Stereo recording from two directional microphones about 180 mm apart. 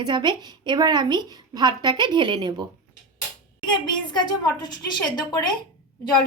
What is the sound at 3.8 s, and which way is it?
A woman's voice, 25° left (ahead or behind).